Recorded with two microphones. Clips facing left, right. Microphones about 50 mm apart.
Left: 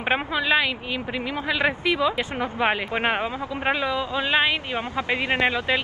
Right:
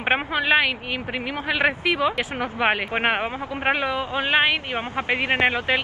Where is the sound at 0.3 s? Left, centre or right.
Right.